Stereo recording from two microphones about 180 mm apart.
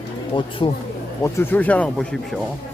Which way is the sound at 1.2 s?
10° left (ahead or behind).